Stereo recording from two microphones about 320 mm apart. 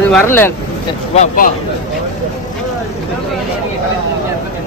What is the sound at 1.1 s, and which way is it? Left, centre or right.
Speech, left.